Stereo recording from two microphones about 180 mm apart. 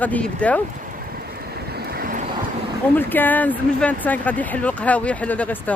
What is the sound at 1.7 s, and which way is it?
Vehicle, 55° right (ahead or behind).